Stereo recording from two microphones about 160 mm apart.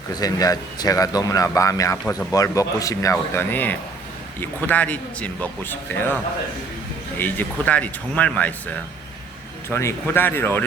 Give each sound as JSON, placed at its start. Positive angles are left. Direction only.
{"t": 0.2, "sound": "speech", "side_deg": 25}
{"t": 7.2, "sound": "speech", "side_deg": 10}